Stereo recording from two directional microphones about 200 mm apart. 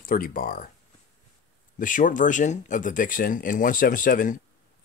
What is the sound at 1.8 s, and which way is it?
Speech, 40° left (ahead or behind).